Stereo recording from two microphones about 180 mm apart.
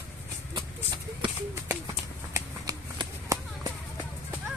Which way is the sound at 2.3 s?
20° right (ahead or behind).